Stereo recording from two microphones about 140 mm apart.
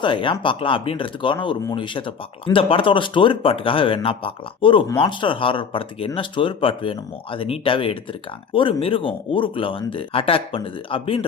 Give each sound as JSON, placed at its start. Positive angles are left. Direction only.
{"t": 0.0, "sound": "speech", "side_deg": 35}